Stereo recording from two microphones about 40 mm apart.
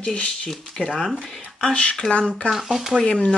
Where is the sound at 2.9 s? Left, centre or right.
Left.